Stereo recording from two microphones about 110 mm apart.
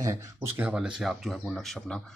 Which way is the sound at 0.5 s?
10° right (ahead or behind).